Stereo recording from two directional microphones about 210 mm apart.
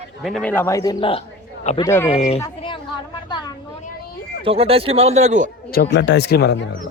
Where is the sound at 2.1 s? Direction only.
30° left (ahead or behind).